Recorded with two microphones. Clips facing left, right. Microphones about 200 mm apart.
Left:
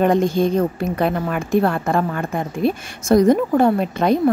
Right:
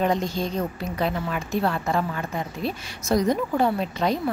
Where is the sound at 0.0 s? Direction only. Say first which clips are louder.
Left 8 dB; 55° left (ahead or behind).